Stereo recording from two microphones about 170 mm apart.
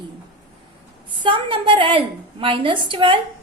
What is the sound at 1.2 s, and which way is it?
A woman's voice, 30° right (ahead or behind).